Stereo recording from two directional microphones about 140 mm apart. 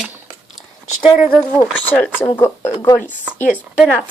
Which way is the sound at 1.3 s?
10° left (ahead or behind).